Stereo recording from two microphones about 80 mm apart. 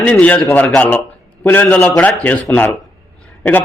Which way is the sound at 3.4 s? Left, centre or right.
Left.